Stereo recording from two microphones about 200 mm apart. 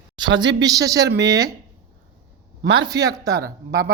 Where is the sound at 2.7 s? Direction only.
20° right (ahead or behind).